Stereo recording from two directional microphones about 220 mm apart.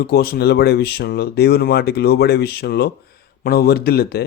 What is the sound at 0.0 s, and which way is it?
A man's voice, 45° left (ahead or behind).